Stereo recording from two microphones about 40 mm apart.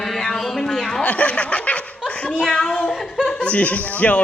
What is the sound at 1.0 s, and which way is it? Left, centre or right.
Speech, left.